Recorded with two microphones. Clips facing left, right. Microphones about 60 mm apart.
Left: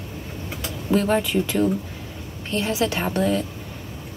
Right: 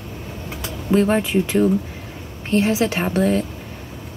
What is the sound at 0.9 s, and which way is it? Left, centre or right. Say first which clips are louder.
Speech: right 3 dB; right.